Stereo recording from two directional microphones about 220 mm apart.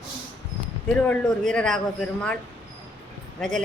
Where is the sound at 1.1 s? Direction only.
5° left (ahead or behind).